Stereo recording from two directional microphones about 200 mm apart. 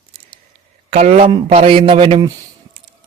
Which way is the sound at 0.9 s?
30° right (ahead or behind).